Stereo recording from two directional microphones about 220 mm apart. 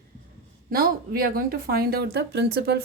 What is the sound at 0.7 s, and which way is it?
A woman's voice, 40° right (ahead or behind).